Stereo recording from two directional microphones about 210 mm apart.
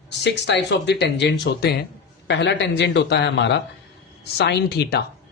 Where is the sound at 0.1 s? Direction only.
55° left (ahead or behind).